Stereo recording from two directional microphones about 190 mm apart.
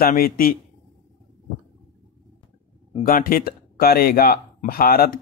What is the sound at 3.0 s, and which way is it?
Speech, 50° left (ahead or behind).